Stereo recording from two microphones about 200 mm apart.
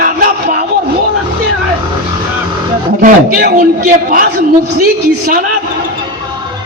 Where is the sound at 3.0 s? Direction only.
45° right (ahead or behind).